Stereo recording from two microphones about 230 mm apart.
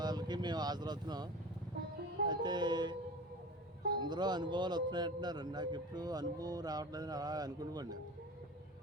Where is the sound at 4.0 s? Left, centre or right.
Centre.